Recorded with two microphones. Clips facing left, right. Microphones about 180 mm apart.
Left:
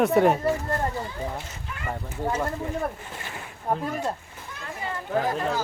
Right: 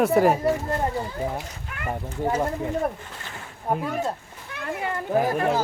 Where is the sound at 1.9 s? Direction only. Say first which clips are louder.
Right 3 dB; 20° right (ahead or behind).